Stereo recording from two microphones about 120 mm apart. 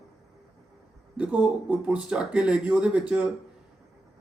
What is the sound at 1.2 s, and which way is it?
A man's voice, 10° right (ahead or behind).